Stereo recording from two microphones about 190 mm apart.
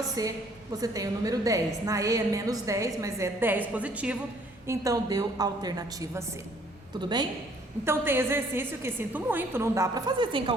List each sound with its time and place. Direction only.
0.2 s a woman's voice: 20° right (ahead or behind)
7.9 s a woman's voice: 10° right (ahead or behind)